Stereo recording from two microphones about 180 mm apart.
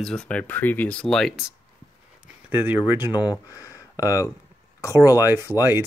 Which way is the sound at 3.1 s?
20° left (ahead or behind).